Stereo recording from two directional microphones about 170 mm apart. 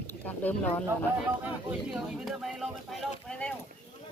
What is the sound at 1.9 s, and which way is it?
Speech, centre (ahead or behind).